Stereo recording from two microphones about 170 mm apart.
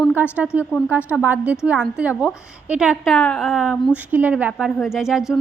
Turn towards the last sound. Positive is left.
turn(degrees=-5)  # may be behind; listen again after turning